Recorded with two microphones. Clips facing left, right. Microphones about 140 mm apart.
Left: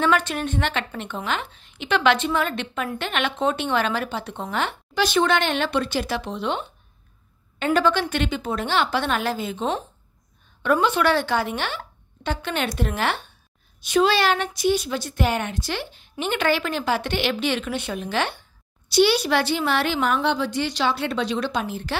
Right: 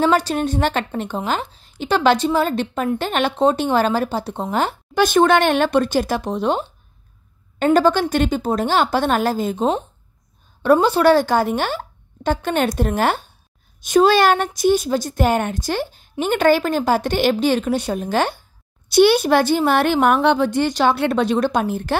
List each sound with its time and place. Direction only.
0.0 s a woman's voice: 35° right (ahead or behind)